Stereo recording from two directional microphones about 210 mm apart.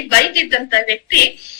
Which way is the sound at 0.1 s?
50° left (ahead or behind).